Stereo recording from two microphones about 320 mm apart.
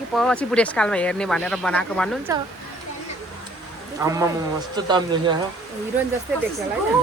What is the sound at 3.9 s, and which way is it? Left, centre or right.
Speech, centre.